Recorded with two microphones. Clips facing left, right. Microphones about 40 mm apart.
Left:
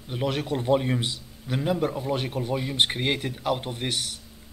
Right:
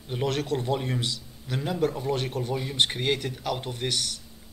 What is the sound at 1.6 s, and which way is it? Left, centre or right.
A man's voice, centre.